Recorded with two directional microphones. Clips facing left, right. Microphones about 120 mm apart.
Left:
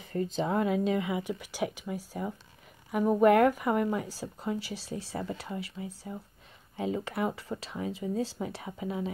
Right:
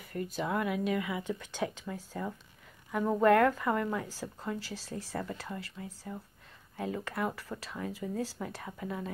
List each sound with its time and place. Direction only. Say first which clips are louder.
0.0 s speech: left 4 dB; 25° left (ahead or behind)
1.2 s speech: left 2 dB; 10° left (ahead or behind)